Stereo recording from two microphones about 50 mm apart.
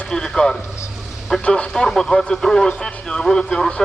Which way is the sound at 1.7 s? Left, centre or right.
Centre.